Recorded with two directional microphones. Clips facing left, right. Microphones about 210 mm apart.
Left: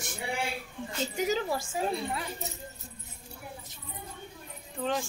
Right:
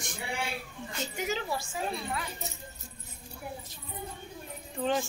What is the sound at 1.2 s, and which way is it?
Speech, 40° left (ahead or behind).